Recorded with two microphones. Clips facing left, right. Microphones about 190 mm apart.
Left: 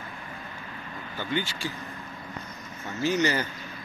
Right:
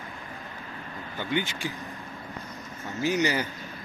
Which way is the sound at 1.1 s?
20° right (ahead or behind).